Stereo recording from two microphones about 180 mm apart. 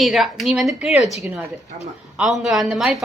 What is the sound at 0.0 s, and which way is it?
Speech, centre (ahead or behind).